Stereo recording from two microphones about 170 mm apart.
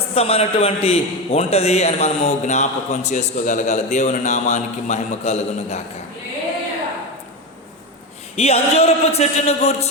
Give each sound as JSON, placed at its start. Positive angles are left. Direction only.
{"t": 0.1, "sound": "a man's voice", "side_deg": 35}
{"t": 8.4, "sound": "a man's voice", "side_deg": 35}